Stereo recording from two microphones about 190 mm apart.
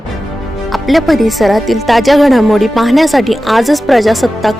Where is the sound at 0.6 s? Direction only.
Centre (ahead or behind).